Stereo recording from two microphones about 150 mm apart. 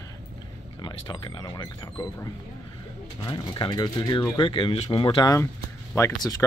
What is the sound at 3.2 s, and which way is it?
Speech, 30° left (ahead or behind).